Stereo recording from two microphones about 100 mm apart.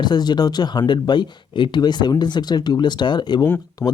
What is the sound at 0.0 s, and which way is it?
Speech, 45° left (ahead or behind).